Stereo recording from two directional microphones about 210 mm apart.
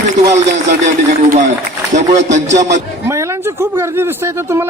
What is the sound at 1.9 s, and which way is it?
Music, 35° right (ahead or behind).